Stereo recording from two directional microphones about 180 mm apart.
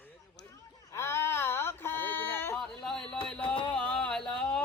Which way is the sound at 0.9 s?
15° left (ahead or behind).